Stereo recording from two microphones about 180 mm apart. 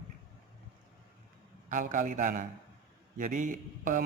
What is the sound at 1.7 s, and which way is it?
Speech, 45° right (ahead or behind).